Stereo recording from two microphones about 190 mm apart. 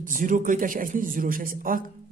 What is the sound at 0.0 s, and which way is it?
A man's voice, 45° right (ahead or behind).